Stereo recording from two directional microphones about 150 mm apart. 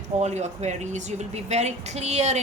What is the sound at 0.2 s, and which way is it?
Speech, 50° right (ahead or behind).